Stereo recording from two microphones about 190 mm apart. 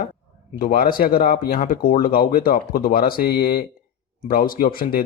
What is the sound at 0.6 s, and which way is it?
Speech, 50° left (ahead or behind).